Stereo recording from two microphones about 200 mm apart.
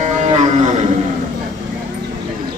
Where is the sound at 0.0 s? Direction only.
35° right (ahead or behind).